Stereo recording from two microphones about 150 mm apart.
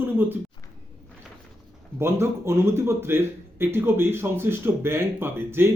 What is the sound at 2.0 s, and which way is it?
Speech, 15° right (ahead or behind).